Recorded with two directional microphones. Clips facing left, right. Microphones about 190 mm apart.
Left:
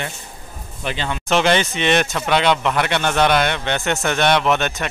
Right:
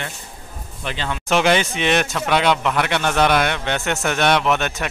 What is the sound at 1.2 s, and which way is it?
Speech, 5° right (ahead or behind).